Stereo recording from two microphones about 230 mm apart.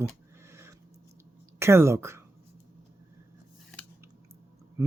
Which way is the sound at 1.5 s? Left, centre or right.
Centre.